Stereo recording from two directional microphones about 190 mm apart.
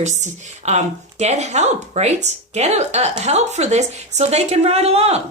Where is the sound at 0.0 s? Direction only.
35° right (ahead or behind).